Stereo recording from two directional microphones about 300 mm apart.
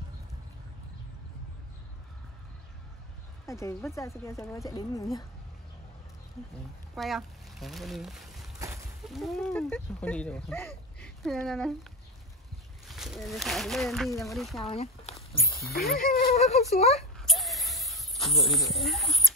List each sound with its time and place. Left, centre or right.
3.4 s speech: centre
7.0 s speech: centre
12.8 s speech: centre
14.6 s speech: centre
15.7 s speech: centre
16.0 s speech: left
17.2 s a sound: centre
18.4 s speech: centre